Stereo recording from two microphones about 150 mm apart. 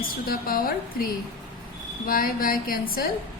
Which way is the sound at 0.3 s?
75° left (ahead or behind).